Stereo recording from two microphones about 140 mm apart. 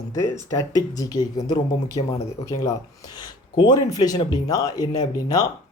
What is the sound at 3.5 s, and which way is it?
Speech, 30° left (ahead or behind).